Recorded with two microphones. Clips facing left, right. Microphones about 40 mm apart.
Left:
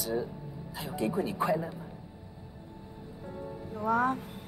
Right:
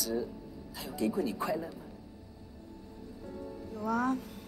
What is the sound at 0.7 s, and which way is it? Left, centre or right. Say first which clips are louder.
Speech: left 1 dB; left.